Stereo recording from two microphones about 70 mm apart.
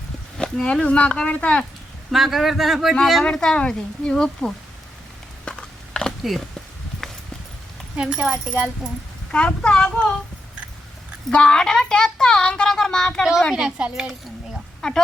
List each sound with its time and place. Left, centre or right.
0.3 s speech: centre
2.0 s speech: centre
3.2 s speech: centre
5.5 s a sound: centre
7.9 s speech: centre
9.3 s speech: centre
11.3 s speech: centre
13.5 s speech: centre
14.8 s speech: centre